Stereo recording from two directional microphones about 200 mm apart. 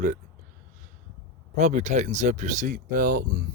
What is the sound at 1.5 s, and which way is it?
Speech, 35° right (ahead or behind).